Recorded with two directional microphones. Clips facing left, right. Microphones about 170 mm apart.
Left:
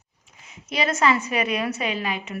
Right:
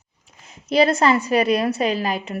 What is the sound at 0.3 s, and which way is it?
A woman's voice, 35° right (ahead or behind).